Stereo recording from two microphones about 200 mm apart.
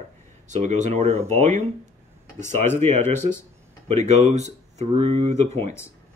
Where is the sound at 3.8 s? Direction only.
35° right (ahead or behind).